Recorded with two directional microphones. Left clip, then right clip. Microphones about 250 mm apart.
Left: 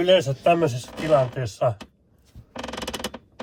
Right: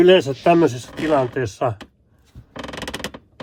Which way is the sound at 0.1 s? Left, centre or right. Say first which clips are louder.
Right 4 dB; centre.